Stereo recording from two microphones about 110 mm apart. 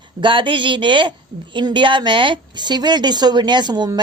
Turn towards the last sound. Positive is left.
turn(degrees=-40)  # may be behind; listen again after turning